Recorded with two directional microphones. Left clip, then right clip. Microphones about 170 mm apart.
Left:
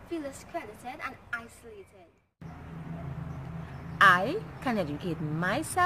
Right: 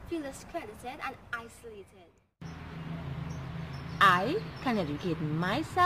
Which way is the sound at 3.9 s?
25° left (ahead or behind).